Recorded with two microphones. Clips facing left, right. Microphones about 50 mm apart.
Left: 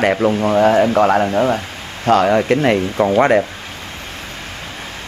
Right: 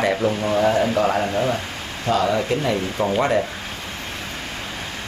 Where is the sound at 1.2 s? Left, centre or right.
Left.